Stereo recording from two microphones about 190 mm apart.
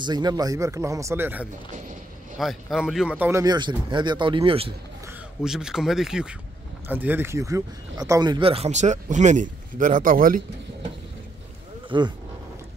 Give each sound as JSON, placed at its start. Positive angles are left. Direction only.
{"t": 0.0, "sound": "speech", "side_deg": -20}
{"t": 5.4, "sound": "speech", "side_deg": -5}
{"t": 11.9, "sound": "speech", "side_deg": -25}